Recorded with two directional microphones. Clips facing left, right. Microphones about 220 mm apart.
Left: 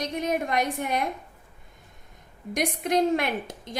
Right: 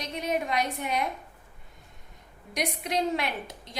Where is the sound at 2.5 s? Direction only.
50° left (ahead or behind).